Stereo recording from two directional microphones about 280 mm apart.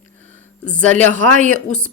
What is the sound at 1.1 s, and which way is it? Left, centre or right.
Speech, right.